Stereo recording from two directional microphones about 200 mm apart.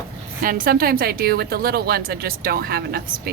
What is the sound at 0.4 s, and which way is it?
Speech, 45° right (ahead or behind).